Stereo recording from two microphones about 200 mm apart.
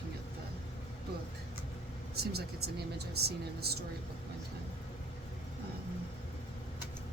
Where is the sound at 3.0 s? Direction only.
55° right (ahead or behind).